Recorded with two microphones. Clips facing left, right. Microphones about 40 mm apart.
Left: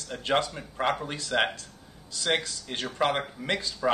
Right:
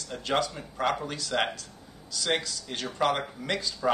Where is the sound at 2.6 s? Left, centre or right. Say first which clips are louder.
Even; left.